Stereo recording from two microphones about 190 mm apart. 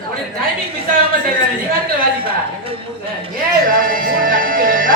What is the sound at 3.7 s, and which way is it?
Music, 45° right (ahead or behind).